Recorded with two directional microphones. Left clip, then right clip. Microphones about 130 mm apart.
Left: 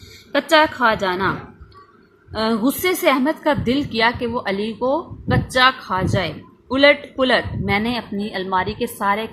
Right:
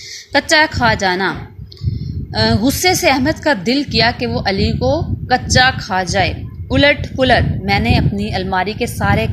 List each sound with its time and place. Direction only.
0.3 s a woman's voice: 25° right (ahead or behind)
2.3 s a woman's voice: 25° right (ahead or behind)